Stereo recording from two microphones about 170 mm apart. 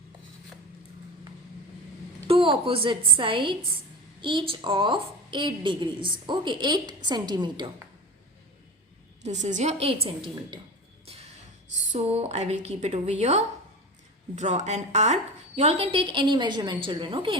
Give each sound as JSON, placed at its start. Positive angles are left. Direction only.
{"t": 2.2, "sound": "a woman's voice", "side_deg": -35}
{"t": 9.2, "sound": "a woman's voice", "side_deg": -45}
{"t": 11.0, "sound": "music", "side_deg": -35}
{"t": 11.9, "sound": "a woman's voice", "side_deg": -40}